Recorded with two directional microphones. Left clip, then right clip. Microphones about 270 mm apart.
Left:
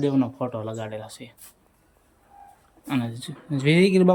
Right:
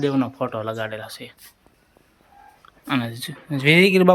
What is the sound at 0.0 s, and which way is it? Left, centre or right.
Speech, centre.